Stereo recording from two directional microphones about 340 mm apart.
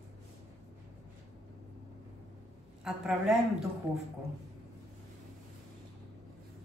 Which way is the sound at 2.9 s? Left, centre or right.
Centre.